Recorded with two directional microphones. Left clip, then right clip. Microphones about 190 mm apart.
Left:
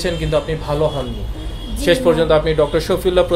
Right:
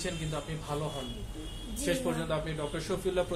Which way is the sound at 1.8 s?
50° left (ahead or behind).